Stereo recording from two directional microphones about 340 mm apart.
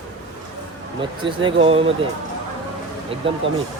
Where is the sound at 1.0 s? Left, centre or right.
Centre.